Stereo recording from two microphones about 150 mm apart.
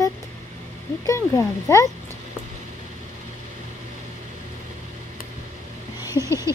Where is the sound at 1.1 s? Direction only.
20° left (ahead or behind).